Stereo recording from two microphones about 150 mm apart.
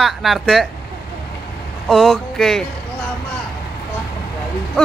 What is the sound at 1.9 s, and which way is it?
Speech, centre (ahead or behind).